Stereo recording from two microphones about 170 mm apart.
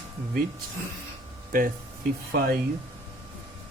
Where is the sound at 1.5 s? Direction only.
55° right (ahead or behind).